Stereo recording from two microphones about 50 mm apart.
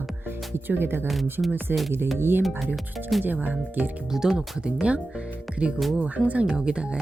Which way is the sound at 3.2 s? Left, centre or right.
Right.